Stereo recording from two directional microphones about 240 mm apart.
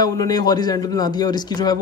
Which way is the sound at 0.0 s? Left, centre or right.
Centre.